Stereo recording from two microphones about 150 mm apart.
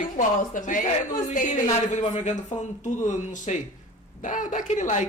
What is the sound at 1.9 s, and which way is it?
Speech, 50° left (ahead or behind).